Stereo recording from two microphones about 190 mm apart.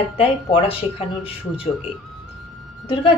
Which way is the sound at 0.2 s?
30° left (ahead or behind).